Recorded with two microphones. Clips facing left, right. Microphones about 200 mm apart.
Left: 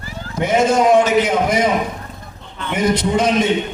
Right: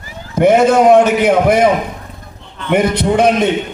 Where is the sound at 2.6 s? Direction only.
60° right (ahead or behind).